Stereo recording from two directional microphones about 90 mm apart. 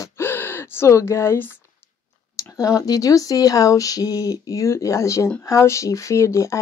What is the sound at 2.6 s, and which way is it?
Speech, 40° left (ahead or behind).